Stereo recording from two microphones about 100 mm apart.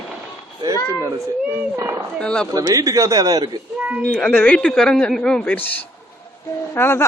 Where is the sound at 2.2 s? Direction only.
10° left (ahead or behind).